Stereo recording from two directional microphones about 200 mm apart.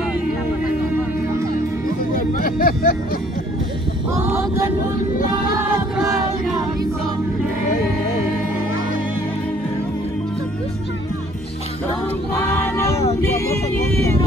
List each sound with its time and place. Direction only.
1.9 s music: 45° left (ahead or behind)
4.1 s a sound: 15° right (ahead or behind)
5.6 s music: 15° right (ahead or behind)
12.4 s music: 15° left (ahead or behind)